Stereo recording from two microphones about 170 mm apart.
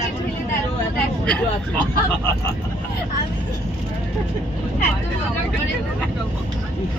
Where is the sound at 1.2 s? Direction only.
5° left (ahead or behind).